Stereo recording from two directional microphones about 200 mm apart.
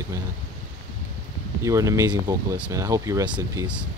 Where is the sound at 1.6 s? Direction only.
15° right (ahead or behind).